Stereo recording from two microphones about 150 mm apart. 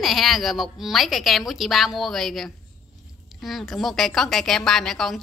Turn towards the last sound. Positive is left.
turn(degrees=0)  # may be behind; listen again after turning